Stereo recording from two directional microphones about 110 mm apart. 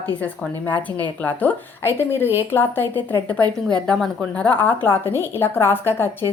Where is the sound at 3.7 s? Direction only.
5° left (ahead or behind).